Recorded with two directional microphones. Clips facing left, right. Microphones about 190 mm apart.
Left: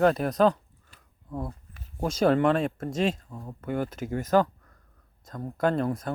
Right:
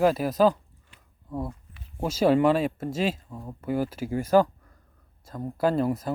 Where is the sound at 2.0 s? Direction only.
5° right (ahead or behind).